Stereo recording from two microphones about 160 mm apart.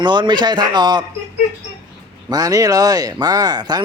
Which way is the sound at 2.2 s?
25° right (ahead or behind).